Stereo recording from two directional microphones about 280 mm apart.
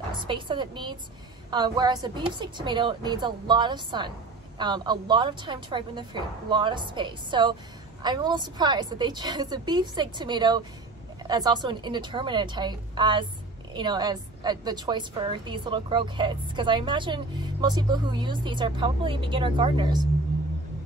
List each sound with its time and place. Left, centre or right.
0.1 s a woman's voice: centre